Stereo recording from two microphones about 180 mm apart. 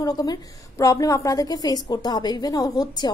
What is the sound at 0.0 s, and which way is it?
A woman's voice, 20° left (ahead or behind).